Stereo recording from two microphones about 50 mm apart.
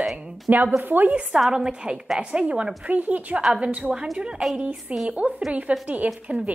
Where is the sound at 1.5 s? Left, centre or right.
Centre.